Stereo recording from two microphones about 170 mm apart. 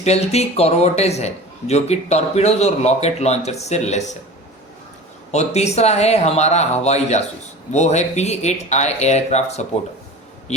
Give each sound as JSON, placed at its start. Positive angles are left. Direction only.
{"t": 0.0, "sound": "a man's voice", "side_deg": 40}
{"t": 5.3, "sound": "a man's voice", "side_deg": 40}